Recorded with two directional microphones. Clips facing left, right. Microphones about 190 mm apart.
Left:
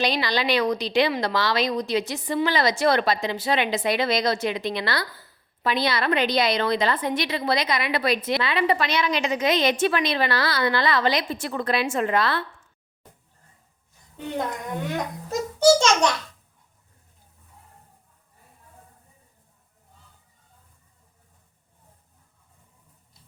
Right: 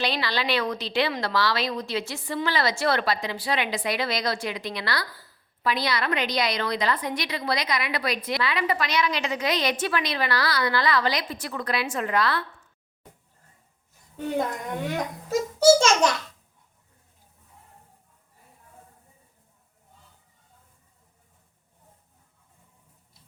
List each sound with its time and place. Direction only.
0.0 s a woman's voice: 15° left (ahead or behind)
15.3 s a child's voice: 5° right (ahead or behind)